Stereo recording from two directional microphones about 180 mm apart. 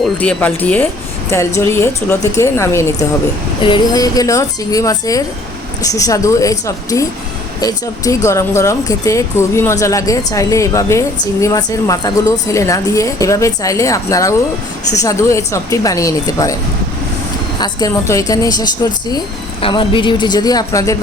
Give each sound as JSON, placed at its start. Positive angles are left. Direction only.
{"t": 0.0, "sound": "speech", "side_deg": 5}
{"t": 17.6, "sound": "speech", "side_deg": 20}